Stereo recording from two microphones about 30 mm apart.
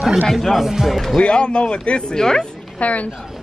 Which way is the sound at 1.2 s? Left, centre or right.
Left.